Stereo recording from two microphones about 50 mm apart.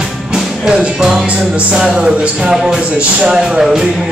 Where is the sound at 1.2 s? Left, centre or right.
Right.